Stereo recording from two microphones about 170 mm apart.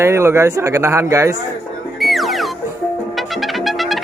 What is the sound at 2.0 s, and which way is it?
Music, centre (ahead or behind).